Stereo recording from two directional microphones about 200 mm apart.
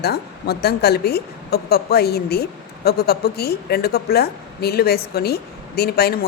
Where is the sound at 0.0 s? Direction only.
50° left (ahead or behind).